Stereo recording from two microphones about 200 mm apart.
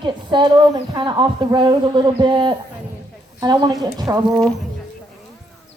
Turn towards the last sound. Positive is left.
turn(degrees=-20)  # may be behind; listen again after turning